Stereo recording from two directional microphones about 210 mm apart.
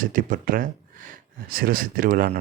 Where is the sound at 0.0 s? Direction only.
40° right (ahead or behind).